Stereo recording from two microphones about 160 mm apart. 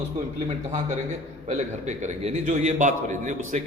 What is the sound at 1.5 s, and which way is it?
A man's voice, 45° right (ahead or behind).